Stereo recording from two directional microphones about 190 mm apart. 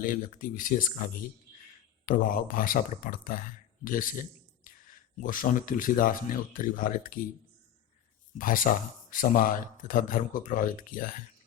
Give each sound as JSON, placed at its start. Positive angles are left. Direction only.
{"t": 0.0, "sound": "a man's voice", "side_deg": 45}
{"t": 8.4, "sound": "speech", "side_deg": 45}